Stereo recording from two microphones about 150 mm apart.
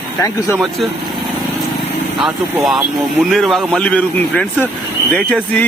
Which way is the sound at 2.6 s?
Centre (ahead or behind).